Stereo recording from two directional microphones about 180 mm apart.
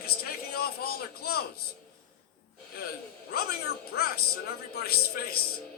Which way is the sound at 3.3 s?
60° left (ahead or behind).